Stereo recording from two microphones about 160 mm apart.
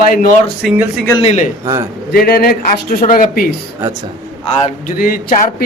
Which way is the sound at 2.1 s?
65° left (ahead or behind).